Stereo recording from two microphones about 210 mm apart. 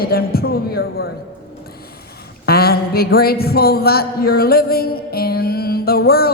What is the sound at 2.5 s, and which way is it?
Speech, 45° left (ahead or behind).